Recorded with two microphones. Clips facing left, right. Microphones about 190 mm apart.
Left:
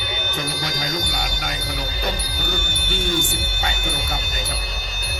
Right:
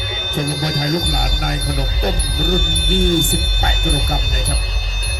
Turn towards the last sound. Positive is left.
turn(degrees=-55)  # may be behind; listen again after turning